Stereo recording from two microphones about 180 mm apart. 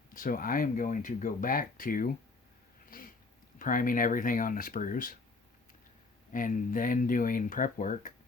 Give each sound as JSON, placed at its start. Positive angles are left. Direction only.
{"t": 0.1, "sound": "speech", "side_deg": 50}
{"t": 2.9, "sound": "a sound", "side_deg": 50}
{"t": 3.6, "sound": "speech", "side_deg": 50}
{"t": 6.3, "sound": "speech", "side_deg": 45}